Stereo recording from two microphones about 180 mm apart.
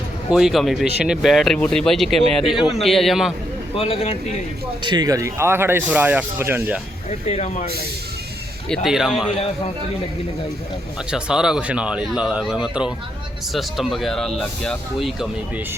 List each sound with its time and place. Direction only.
0.3 s speech: 5° right (ahead or behind)
3.8 s speech: 35° left (ahead or behind)
4.8 s speech: 25° right (ahead or behind)
7.1 s speech: 40° left (ahead or behind)
8.7 s speech: centre (ahead or behind)
11.1 s speech: 5° right (ahead or behind)